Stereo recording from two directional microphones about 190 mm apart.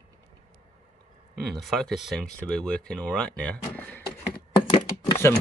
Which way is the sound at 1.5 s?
Centre (ahead or behind).